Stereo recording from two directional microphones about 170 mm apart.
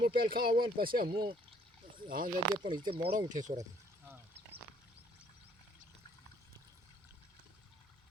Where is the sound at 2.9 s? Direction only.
35° right (ahead or behind).